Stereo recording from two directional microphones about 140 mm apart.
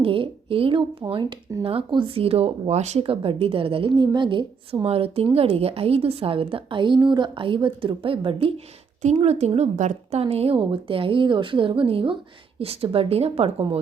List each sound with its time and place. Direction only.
0.0 s a woman's voice: 40° right (ahead or behind)
3.0 s a woman's voice: 40° right (ahead or behind)
9.0 s a woman's voice: 55° right (ahead or behind)